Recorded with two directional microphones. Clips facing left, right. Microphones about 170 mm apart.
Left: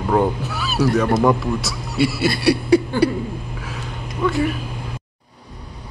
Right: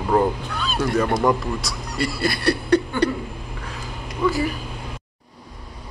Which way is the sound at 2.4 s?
10° left (ahead or behind).